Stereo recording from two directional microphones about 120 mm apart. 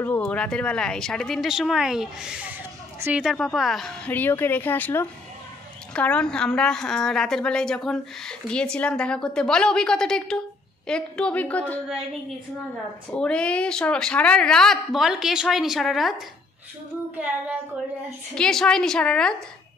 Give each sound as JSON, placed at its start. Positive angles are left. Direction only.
{"t": 0.0, "sound": "a woman's voice", "side_deg": 15}
{"t": 3.3, "sound": "a woman's voice", "side_deg": 0}
{"t": 4.1, "sound": "a woman's voice", "side_deg": 15}
{"t": 13.1, "sound": "a woman's voice", "side_deg": 10}
{"t": 18.3, "sound": "a woman's voice", "side_deg": 5}